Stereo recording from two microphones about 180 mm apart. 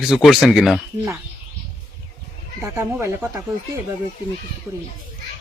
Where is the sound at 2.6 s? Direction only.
15° right (ahead or behind).